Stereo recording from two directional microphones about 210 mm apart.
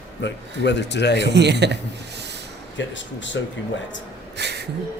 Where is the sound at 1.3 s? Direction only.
55° right (ahead or behind).